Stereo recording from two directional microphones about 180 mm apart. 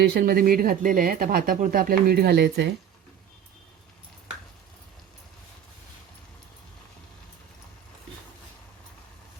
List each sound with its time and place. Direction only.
0.1 s speech: 55° right (ahead or behind)